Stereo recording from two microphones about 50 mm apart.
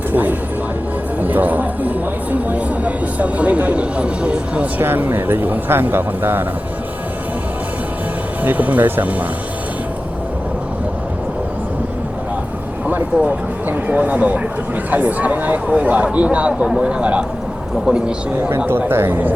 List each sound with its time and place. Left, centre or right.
0.1 s music: right
2.3 s a sound: right
4.8 s speech: right
8.4 s speech: right
12.9 s speech: right; by 18.1 s centre
18.9 s speech: right